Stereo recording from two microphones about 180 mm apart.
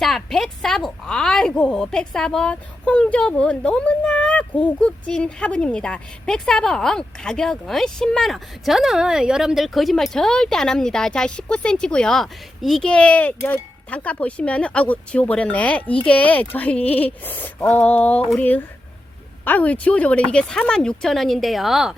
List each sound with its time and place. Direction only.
0.0 s a woman's voice: centre (ahead or behind)